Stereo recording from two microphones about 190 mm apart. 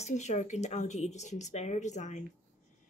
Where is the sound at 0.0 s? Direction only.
35° left (ahead or behind).